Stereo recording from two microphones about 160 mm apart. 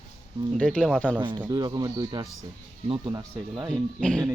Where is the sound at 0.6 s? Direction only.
5° left (ahead or behind).